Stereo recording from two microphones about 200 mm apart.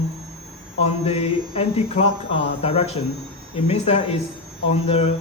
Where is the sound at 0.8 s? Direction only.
30° left (ahead or behind).